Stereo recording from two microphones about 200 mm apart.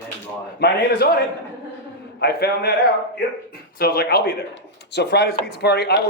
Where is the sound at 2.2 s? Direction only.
55° left (ahead or behind).